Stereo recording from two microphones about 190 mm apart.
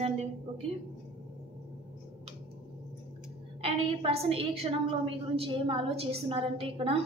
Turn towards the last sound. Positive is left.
turn(degrees=-30)  # may be behind; listen again after turning